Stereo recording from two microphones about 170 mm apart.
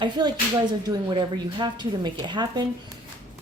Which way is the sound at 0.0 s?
25° right (ahead or behind).